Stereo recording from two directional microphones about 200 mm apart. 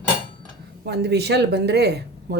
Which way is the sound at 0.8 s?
55° right (ahead or behind).